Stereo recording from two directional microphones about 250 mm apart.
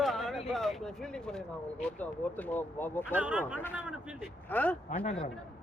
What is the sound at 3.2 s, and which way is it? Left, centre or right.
Speech, centre.